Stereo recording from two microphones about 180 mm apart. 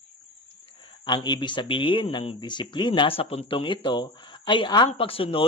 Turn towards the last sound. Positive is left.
turn(degrees=30)  # may be behind; listen again after turning